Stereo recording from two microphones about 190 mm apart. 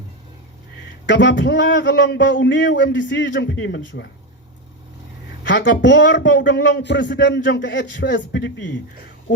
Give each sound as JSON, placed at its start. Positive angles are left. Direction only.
{"t": 1.0, "sound": "speech", "side_deg": 70}
{"t": 5.4, "sound": "speech", "side_deg": 70}